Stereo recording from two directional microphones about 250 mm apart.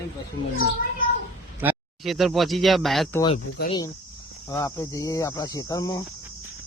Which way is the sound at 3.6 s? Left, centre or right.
Left.